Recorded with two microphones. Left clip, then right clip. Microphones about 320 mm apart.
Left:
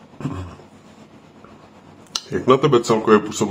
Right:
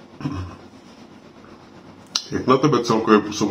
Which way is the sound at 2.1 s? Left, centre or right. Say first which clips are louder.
Left 2 dB; centre.